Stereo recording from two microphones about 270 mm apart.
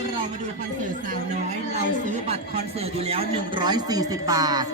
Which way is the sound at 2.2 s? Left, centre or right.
Right.